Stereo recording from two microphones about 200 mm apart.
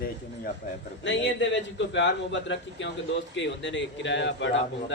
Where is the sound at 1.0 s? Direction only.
65° left (ahead or behind).